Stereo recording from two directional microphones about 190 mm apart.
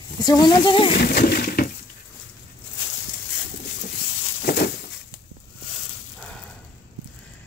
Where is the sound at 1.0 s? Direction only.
50° left (ahead or behind).